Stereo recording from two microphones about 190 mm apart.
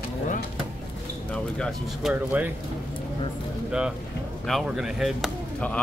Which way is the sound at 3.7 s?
5° right (ahead or behind).